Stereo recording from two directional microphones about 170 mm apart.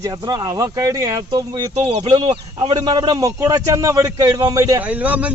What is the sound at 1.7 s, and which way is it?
Speech, 40° right (ahead or behind).